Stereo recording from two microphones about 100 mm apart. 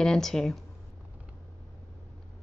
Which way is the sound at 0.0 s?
5° left (ahead or behind).